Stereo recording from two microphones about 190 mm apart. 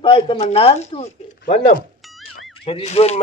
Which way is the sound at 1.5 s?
40° left (ahead or behind).